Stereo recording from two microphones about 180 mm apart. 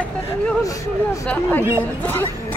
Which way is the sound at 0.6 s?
20° left (ahead or behind).